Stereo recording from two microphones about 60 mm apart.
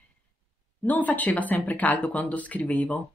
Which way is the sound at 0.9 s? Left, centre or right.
Left.